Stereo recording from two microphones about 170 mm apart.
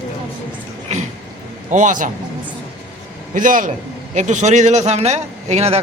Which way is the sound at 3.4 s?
50° right (ahead or behind).